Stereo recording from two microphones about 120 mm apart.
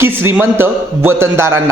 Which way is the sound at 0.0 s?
20° right (ahead or behind).